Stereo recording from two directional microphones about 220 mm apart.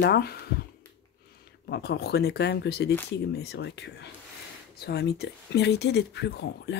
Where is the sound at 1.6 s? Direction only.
50° left (ahead or behind).